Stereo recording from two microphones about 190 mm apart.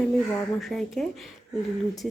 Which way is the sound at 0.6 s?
Centre (ahead or behind).